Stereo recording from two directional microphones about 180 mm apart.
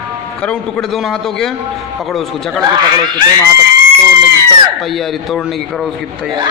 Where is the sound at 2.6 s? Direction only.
20° right (ahead or behind).